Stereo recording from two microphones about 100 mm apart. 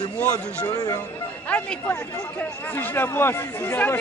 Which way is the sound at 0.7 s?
40° left (ahead or behind).